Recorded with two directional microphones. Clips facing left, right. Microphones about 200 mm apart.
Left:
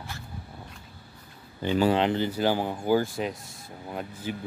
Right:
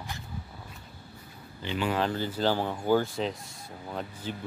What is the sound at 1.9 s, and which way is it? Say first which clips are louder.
Speech: left 5 dB; 20° left (ahead or behind).